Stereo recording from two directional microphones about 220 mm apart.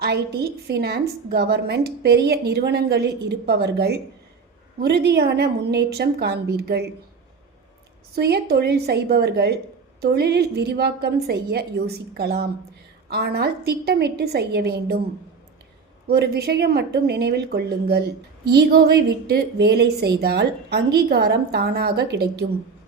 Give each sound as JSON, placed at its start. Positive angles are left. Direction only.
{"t": 0.0, "sound": "a woman's voice", "side_deg": -45}
{"t": 8.1, "sound": "a woman's voice", "side_deg": -45}
{"t": 16.0, "sound": "a woman's voice", "side_deg": -45}